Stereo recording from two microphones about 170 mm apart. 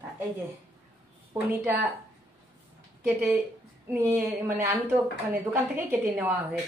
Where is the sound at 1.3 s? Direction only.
10° right (ahead or behind).